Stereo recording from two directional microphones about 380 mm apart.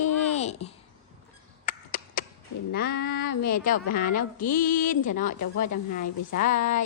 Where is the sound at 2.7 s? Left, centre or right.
Left.